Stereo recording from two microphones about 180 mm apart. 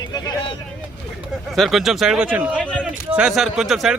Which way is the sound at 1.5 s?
Centre (ahead or behind).